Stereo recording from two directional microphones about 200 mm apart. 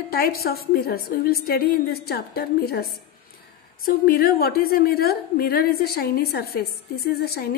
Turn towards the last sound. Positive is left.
turn(degrees=50)  # may be behind; listen again after turning